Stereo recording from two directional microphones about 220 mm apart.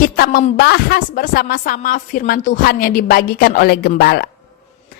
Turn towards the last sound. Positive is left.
turn(degrees=45)  # may be behind; listen again after turning